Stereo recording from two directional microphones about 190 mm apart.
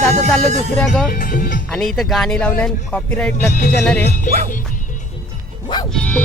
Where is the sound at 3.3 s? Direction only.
45° left (ahead or behind).